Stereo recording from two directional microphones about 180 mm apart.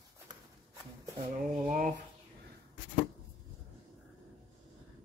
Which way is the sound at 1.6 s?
45° right (ahead or behind).